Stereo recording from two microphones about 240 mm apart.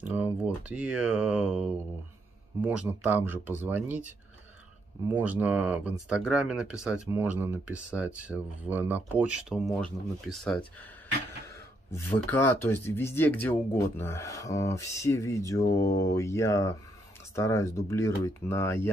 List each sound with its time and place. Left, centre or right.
0.0 s speech: centre
2.6 s speech: centre
5.1 s speech: centre
11.9 s speech: centre